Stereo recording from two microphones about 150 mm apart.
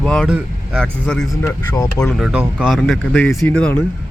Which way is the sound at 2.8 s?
5° left (ahead or behind).